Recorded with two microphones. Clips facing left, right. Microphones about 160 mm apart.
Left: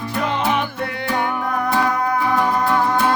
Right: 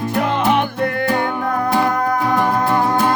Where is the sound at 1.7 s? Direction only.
40° right (ahead or behind).